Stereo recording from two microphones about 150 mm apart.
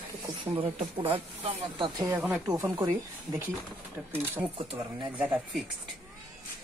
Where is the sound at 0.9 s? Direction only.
35° right (ahead or behind).